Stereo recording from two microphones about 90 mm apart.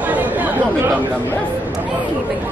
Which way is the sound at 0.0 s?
20° right (ahead or behind).